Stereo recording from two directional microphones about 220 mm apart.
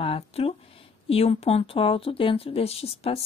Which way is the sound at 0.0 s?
25° left (ahead or behind).